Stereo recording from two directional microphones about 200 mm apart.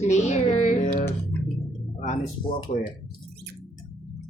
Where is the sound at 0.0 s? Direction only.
35° left (ahead or behind).